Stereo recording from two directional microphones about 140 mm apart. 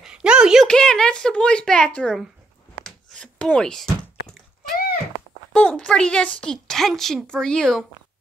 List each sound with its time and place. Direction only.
0.0 s a child's voice: 5° right (ahead or behind)
2.8 s chopping: 5° left (ahead or behind)
4.7 s a sound: 90° left
5.5 s a woman's voice: 5° left (ahead or behind)